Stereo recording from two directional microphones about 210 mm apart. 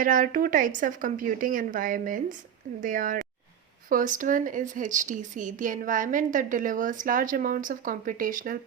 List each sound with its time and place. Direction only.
0.0 s speech: 40° right (ahead or behind)